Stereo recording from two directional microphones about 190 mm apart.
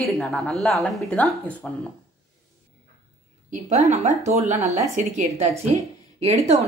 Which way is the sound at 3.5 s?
40° right (ahead or behind).